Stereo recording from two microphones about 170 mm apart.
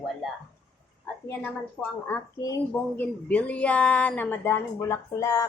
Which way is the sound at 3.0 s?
10° left (ahead or behind).